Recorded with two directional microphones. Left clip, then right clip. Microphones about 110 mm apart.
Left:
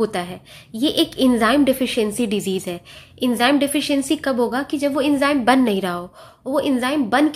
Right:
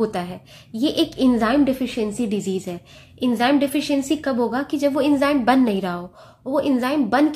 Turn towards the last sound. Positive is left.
turn(degrees=15)  # may be behind; listen again after turning